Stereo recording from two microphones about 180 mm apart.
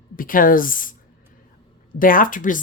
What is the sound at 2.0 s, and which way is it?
Speech, 50° left (ahead or behind).